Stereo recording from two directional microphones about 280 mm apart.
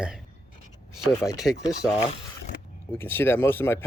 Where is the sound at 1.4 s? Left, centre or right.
Centre.